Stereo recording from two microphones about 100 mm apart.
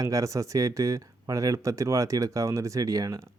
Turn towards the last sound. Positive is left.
turn(degrees=-35)  # may be behind; listen again after turning